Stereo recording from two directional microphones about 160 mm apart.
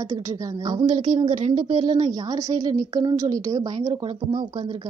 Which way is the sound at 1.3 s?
50° right (ahead or behind).